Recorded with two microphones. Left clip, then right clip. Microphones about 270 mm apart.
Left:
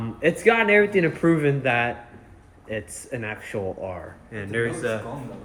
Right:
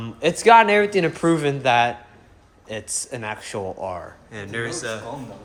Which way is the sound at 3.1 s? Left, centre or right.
Centre.